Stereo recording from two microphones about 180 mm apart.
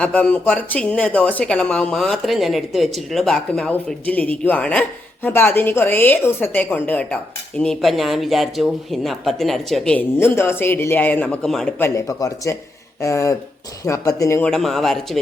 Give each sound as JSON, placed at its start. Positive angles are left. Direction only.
{"t": 0.0, "sound": "speech", "side_deg": 10}
{"t": 11.9, "sound": "speech", "side_deg": 20}
{"t": 14.5, "sound": "speech", "side_deg": 0}